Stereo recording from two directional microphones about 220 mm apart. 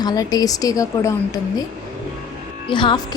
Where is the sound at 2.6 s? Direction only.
20° left (ahead or behind).